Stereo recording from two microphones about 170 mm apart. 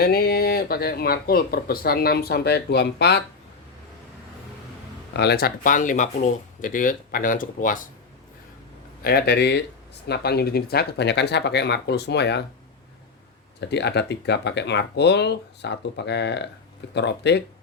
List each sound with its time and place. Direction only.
0.0 s speech: 65° left (ahead or behind)
5.1 s speech: 75° left (ahead or behind); by 7.9 s 50° left (ahead or behind)
9.0 s speech: 70° left (ahead or behind)
13.6 s speech: 80° left